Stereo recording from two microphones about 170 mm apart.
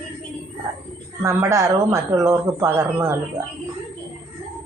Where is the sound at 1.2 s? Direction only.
15° right (ahead or behind).